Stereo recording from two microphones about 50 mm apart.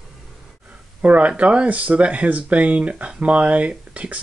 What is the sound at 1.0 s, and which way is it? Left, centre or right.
Speech, right.